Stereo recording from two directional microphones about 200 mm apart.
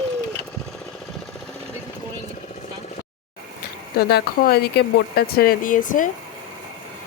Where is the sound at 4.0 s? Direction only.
55° left (ahead or behind).